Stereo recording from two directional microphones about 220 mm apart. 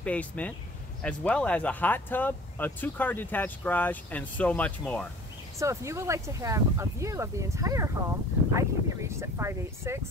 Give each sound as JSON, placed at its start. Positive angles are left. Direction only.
{"t": 0.0, "sound": "speech", "side_deg": 5}
{"t": 5.6, "sound": "speech", "side_deg": -15}